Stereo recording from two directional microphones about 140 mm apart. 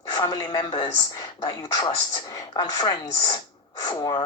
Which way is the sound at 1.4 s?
30° left (ahead or behind).